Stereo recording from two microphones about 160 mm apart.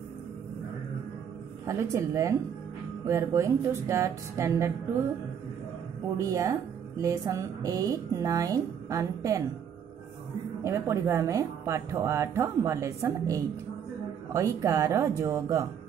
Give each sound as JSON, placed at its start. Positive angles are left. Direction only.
{"t": 1.7, "sound": "a woman's voice", "side_deg": -20}
{"t": 6.1, "sound": "a woman's voice", "side_deg": -20}
{"t": 10.6, "sound": "a woman's voice", "side_deg": -15}